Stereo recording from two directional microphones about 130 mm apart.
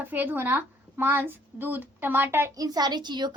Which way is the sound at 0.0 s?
15° right (ahead or behind).